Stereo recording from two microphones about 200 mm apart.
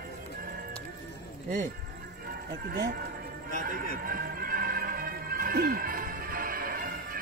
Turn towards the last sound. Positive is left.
turn(degrees=-45)  # may be behind; listen again after turning